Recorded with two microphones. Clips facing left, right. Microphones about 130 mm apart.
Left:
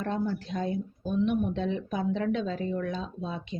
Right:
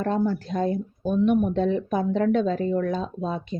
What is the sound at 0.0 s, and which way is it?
Speech, 45° right (ahead or behind).